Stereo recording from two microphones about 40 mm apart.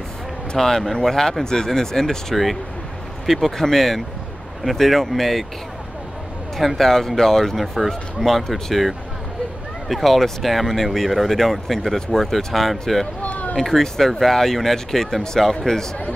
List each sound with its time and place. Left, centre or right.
0.6 s speech: centre
6.5 s speech: centre
9.8 s speech: centre
13.2 s a sound: left
13.6 s speech: centre